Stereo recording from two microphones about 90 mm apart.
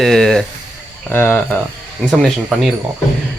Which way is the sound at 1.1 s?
20° left (ahead or behind).